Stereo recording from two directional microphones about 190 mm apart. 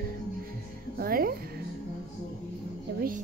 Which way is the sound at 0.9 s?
50° right (ahead or behind).